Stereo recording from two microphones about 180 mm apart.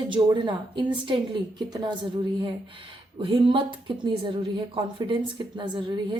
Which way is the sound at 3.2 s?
30° right (ahead or behind).